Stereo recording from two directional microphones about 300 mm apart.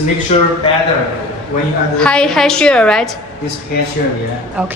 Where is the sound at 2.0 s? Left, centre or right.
Centre.